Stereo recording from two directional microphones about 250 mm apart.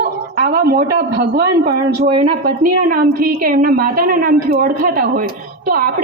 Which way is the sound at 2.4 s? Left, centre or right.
Right.